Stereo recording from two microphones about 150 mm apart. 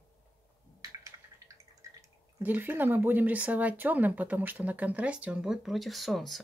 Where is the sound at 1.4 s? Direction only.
20° right (ahead or behind).